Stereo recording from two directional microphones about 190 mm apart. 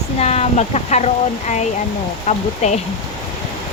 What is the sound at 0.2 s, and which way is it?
Speech, 35° left (ahead or behind).